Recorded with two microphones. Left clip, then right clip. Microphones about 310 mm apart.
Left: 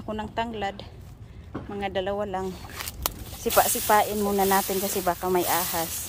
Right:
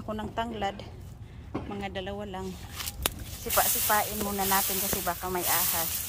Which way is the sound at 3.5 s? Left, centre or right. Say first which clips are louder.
Left 6 dB; left.